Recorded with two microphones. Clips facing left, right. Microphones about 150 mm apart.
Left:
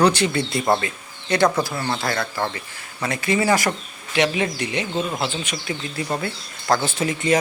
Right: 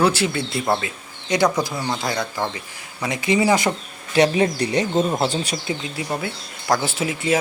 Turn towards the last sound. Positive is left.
turn(degrees=-5)  # may be behind; listen again after turning